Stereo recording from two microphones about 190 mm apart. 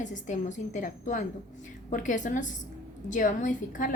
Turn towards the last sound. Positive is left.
turn(degrees=45)  # may be behind; listen again after turning